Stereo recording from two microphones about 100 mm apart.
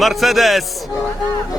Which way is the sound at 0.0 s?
Centre (ahead or behind).